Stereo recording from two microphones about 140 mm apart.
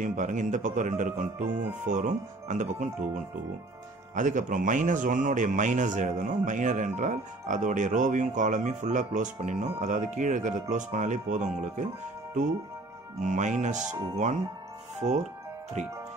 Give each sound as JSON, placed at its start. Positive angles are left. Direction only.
{"t": 0.0, "sound": "a man's voice", "side_deg": -65}
{"t": 4.1, "sound": "a man's voice", "side_deg": -65}
{"t": 13.2, "sound": "a man's voice", "side_deg": -60}